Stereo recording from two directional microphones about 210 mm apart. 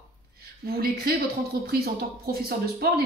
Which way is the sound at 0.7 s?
45° right (ahead or behind).